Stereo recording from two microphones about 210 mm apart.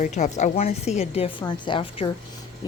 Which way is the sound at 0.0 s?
35° left (ahead or behind).